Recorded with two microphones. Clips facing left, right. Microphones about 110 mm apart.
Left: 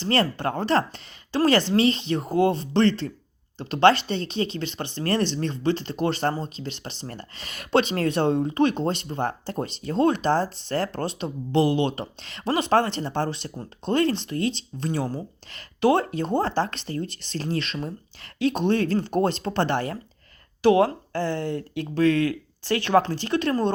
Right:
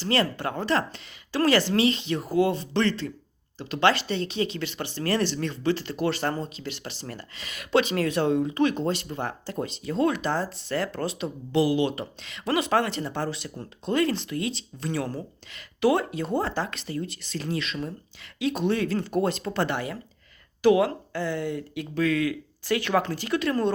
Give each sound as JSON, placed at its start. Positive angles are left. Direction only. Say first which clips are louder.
{"t": 0.0, "sound": "speech", "louder": "left 2 dB", "side_deg": 35}
{"t": 8.3, "sound": "speech", "louder": "left 2 dB", "side_deg": 40}